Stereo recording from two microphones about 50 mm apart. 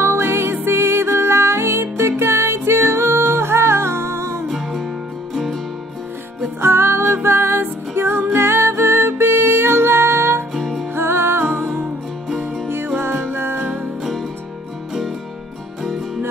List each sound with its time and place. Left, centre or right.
0.0 s music: right
4.5 s music: centre
6.6 s music: right
11.4 s music: right
12.6 s music: right